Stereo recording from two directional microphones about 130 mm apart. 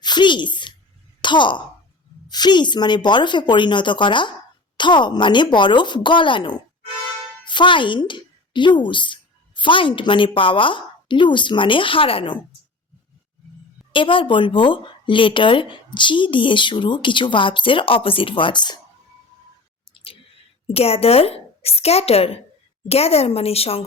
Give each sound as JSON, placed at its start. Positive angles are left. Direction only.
{"t": 0.0, "sound": "a woman's voice", "side_deg": 35}
{"t": 13.9, "sound": "a woman's voice", "side_deg": 40}
{"t": 20.7, "sound": "a woman's voice", "side_deg": 50}